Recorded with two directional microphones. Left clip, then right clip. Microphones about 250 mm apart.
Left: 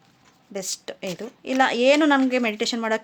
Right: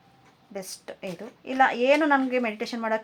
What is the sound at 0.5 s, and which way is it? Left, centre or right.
Speech, left.